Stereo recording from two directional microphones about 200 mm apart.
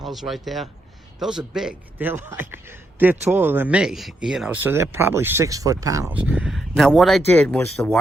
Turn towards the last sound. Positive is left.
turn(degrees=10)  # may be behind; listen again after turning